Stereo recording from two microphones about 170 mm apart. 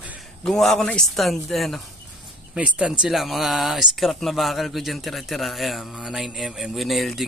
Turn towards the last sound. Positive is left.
turn(degrees=0)  # may be behind; listen again after turning